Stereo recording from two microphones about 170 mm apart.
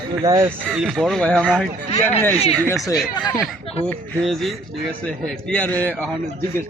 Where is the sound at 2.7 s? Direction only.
Centre (ahead or behind).